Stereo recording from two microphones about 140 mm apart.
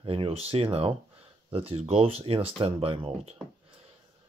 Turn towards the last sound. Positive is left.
turn(degrees=-40)  # may be behind; listen again after turning